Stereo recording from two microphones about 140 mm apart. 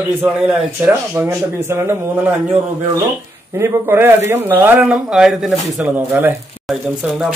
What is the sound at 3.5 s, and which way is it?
A man's voice, 15° right (ahead or behind).